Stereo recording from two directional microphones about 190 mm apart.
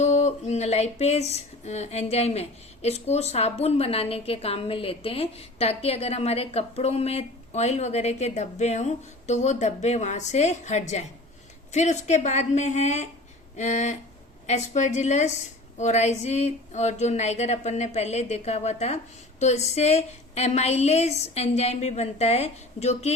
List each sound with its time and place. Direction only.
0.0 s speech: 35° left (ahead or behind)